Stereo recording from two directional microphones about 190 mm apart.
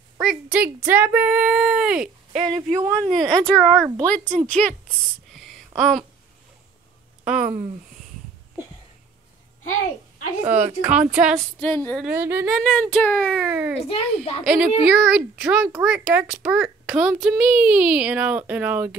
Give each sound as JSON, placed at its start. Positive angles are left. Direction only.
{"t": 0.2, "sound": "speech", "side_deg": -5}
{"t": 2.4, "sound": "speech", "side_deg": -20}
{"t": 3.0, "sound": "speech", "side_deg": 5}
{"t": 5.8, "sound": "speech", "side_deg": 0}
{"t": 7.4, "sound": "speech", "side_deg": -35}
{"t": 10.4, "sound": "speech", "side_deg": -10}
{"t": 11.6, "sound": "speech", "side_deg": 10}
{"t": 12.0, "sound": "speech", "side_deg": -10}
{"t": 13.8, "sound": "a child's voice", "side_deg": 30}
{"t": 14.4, "sound": "speech", "side_deg": -5}